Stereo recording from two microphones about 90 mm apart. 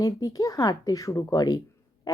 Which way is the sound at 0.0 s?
40° left (ahead or behind).